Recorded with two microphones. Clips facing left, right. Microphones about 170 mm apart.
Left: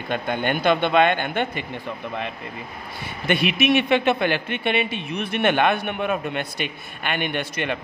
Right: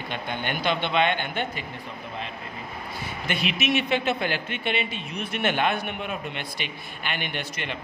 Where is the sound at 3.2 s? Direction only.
60° left (ahead or behind).